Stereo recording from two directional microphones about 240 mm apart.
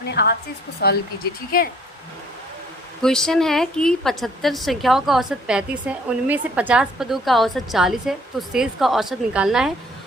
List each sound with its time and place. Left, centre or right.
0.1 s speech: left
3.0 s a woman's voice: centre